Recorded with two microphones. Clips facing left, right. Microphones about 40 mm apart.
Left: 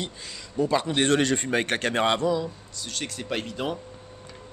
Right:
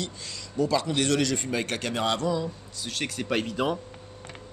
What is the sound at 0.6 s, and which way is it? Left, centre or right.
A man's voice, left.